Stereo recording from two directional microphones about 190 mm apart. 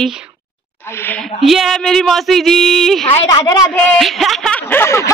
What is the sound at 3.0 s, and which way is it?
Speech, 25° left (ahead or behind).